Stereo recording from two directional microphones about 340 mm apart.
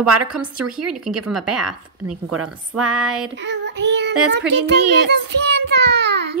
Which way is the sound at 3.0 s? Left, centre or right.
Centre.